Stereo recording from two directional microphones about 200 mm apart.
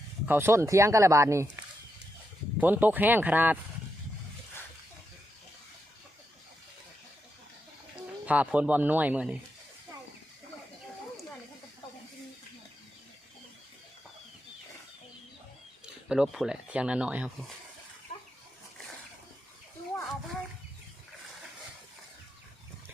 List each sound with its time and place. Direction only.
0.3 s speech: 10° right (ahead or behind)
8.3 s speech: 5° right (ahead or behind)
16.0 s speech: 5° right (ahead or behind)
18.1 s a sound: 30° left (ahead or behind)